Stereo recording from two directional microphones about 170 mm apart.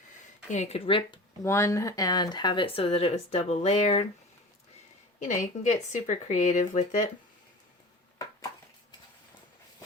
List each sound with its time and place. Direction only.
0.5 s speech: 40° left (ahead or behind)
1.5 s speech: 15° left (ahead or behind); by 4.0 s 40° left (ahead or behind)
5.2 s speech: 45° left (ahead or behind)